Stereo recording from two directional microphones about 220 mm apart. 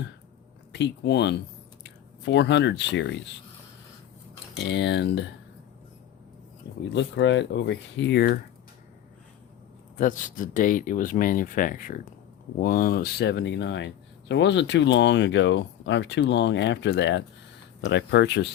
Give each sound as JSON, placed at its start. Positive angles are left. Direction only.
{"t": 0.7, "sound": "speech", "side_deg": 50}
{"t": 4.6, "sound": "speech", "side_deg": 50}
{"t": 6.9, "sound": "speech", "side_deg": 55}
{"t": 10.0, "sound": "speech", "side_deg": 35}